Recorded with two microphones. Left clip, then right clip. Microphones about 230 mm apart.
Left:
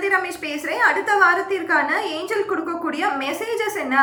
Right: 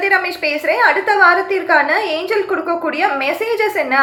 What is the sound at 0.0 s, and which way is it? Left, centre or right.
A woman's voice, centre.